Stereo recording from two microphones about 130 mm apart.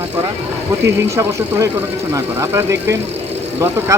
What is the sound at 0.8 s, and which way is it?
Speech, 25° right (ahead or behind).